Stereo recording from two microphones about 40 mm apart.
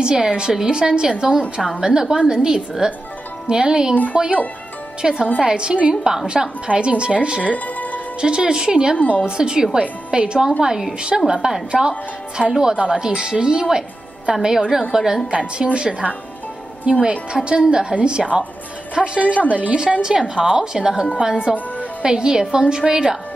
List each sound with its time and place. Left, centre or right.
0.0 s a woman's voice: centre
4.1 s speech: right
5.0 s speech: centre
7.5 s music: left
8.2 s speech: right
8.9 s speech: left
9.2 s speech: centre
10.6 s a woman's voice: centre
11.7 s speech: centre
12.4 s a woman's voice: centre
15.3 s a woman's voice: right
20.0 s a woman's voice: centre